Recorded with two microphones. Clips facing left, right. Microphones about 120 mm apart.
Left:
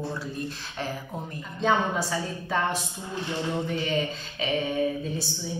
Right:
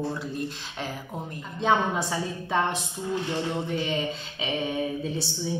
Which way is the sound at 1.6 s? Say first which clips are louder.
Right 1 dB; 20° right (ahead or behind).